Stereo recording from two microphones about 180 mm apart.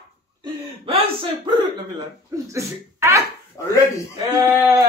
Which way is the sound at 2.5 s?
15° right (ahead or behind).